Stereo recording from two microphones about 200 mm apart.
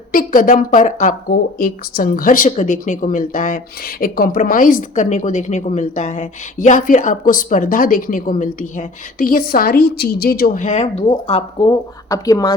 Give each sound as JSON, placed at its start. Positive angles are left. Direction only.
{"t": 0.1, "sound": "speech", "side_deg": 45}
{"t": 12.0, "sound": "speech", "side_deg": 15}